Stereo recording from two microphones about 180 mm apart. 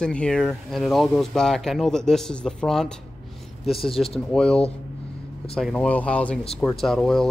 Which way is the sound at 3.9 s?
30° left (ahead or behind).